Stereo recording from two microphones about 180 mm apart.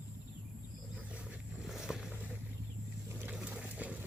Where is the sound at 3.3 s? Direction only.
5° right (ahead or behind).